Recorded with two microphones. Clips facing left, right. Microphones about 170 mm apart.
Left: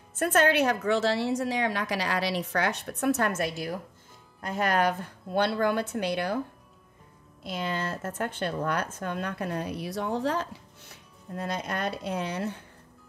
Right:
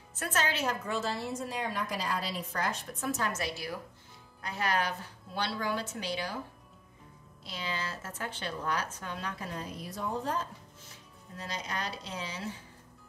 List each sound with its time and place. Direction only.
0.1 s a woman's voice: 55° left (ahead or behind)
7.4 s speech: 50° left (ahead or behind)